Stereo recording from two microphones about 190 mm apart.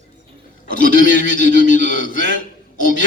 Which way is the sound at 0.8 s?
45° left (ahead or behind).